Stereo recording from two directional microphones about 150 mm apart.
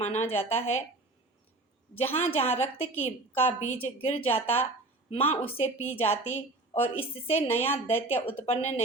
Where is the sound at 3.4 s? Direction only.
40° left (ahead or behind).